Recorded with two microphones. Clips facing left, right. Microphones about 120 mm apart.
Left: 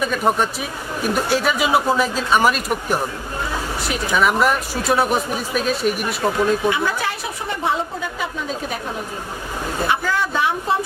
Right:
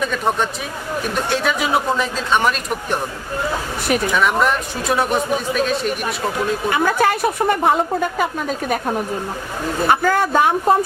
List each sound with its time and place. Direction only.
0.0 s speech: 5° left (ahead or behind)
4.1 s speech: 5° left (ahead or behind)
6.7 s a woman's voice: 50° right (ahead or behind)
9.8 s a woman's voice: 50° right (ahead or behind)